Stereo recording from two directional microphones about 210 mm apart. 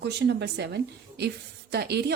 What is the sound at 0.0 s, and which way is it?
Speech, 55° right (ahead or behind).